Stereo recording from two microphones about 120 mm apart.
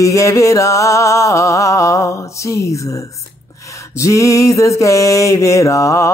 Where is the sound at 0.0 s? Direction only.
25° left (ahead or behind).